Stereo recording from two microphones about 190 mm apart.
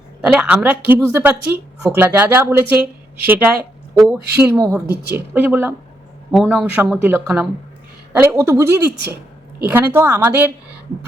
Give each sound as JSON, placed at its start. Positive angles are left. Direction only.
{"t": 0.2, "sound": "a woman's voice", "side_deg": -5}